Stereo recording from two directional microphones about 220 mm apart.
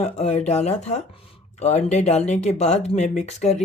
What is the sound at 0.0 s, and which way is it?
Speech, 30° left (ahead or behind).